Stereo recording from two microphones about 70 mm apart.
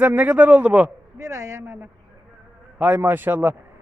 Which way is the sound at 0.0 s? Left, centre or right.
Right.